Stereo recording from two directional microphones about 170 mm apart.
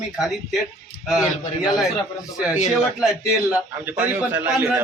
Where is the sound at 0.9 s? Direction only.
65° left (ahead or behind).